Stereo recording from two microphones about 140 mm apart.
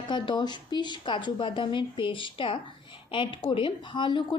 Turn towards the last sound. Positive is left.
turn(degrees=35)  # may be behind; listen again after turning